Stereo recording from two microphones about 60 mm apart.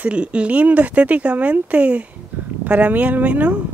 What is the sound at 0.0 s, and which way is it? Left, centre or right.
Speech, centre.